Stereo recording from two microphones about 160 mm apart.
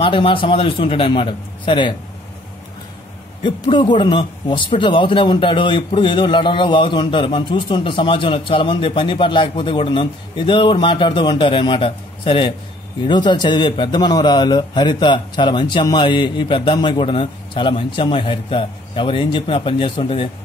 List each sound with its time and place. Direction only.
0.0 s speech: 35° left (ahead or behind)
3.4 s a man's voice: 30° left (ahead or behind)